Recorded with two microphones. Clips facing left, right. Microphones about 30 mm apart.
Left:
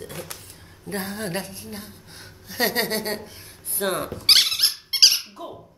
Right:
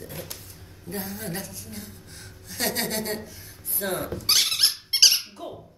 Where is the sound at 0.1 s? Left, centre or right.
Left.